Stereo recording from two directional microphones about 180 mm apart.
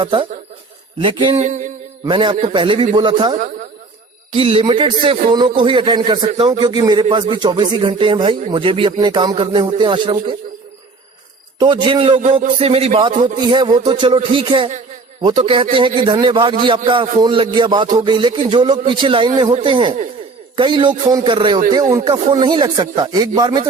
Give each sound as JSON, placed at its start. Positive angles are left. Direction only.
{"t": 0.0, "sound": "speech", "side_deg": -30}
{"t": 1.5, "sound": "a sound", "side_deg": -45}
{"t": 2.0, "sound": "speech", "side_deg": -25}
{"t": 3.3, "sound": "speech", "side_deg": -45}
{"t": 4.4, "sound": "speech", "side_deg": -30}
{"t": 11.6, "sound": "speech", "side_deg": -25}